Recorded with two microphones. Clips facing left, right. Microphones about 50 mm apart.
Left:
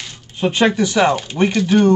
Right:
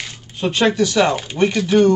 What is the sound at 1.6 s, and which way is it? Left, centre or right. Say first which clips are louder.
Speech: right 1 dB; centre.